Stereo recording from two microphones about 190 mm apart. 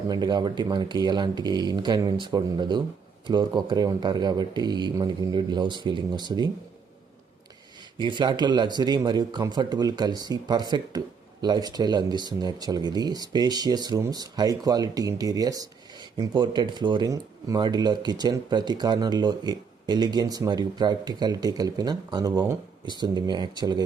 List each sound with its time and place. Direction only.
0.1 s speech: 20° right (ahead or behind)
7.9 s speech: 25° right (ahead or behind)